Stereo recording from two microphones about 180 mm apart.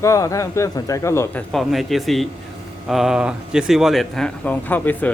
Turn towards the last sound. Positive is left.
turn(degrees=10)  # may be behind; listen again after turning